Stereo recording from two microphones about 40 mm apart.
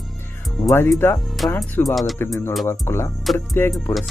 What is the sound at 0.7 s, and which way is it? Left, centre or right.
Speech, left.